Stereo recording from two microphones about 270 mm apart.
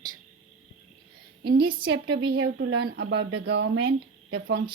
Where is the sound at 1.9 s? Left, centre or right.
Right.